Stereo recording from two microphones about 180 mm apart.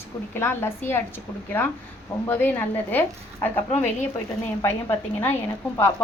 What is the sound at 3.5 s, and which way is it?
Speech, 40° left (ahead or behind).